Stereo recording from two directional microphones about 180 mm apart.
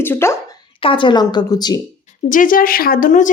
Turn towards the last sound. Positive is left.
turn(degrees=45)  # may be behind; listen again after turning